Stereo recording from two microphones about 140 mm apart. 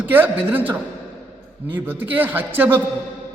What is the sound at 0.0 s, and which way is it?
A man's voice, 15° right (ahead or behind).